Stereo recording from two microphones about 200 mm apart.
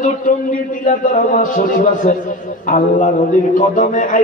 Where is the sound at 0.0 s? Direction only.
40° left (ahead or behind).